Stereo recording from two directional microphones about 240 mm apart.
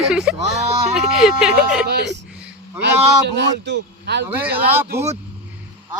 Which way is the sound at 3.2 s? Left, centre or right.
Right.